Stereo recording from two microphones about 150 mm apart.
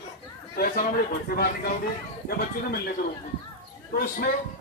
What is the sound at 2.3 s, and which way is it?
Speech, 90° left.